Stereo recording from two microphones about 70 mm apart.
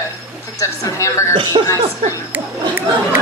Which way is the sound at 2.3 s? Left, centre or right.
Right.